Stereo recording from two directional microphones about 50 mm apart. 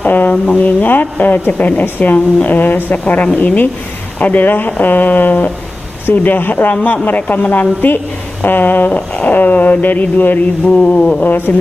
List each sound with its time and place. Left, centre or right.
0.0 s speech: left
6.7 s mantra: left
7.1 s speech: left
10.8 s mantra: left